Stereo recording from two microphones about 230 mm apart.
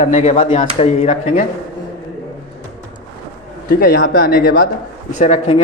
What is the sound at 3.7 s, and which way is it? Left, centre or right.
A man's voice, left.